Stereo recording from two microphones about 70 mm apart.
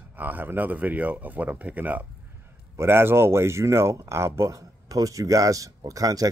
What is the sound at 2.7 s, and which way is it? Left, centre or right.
Speech, right.